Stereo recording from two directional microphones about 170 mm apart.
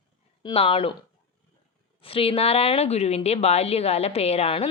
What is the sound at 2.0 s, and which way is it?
A woman's voice, 35° left (ahead or behind).